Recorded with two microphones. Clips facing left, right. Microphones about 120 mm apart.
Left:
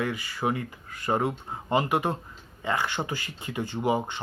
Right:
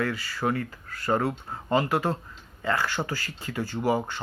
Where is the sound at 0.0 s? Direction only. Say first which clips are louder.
Right 1 dB; 20° left (ahead or behind).